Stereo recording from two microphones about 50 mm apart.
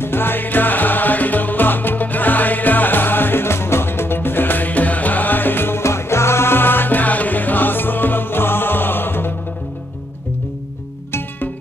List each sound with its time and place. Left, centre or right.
0.0 s music: left